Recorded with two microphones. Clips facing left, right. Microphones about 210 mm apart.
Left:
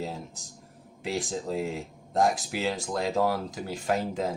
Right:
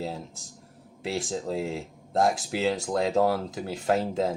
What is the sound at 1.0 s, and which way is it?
Speech, 30° right (ahead or behind).